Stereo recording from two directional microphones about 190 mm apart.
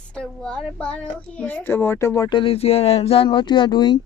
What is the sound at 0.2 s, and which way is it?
A child's voice, 5° left (ahead or behind).